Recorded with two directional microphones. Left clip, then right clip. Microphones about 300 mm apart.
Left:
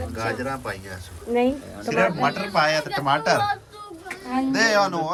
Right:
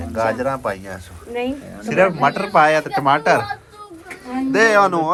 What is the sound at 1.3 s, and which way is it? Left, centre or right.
Speech, left.